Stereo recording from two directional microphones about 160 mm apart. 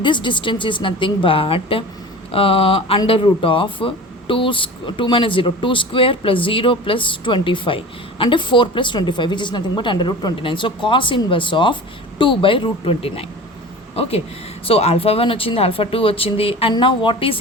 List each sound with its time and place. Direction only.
0.0 s speech: 30° left (ahead or behind)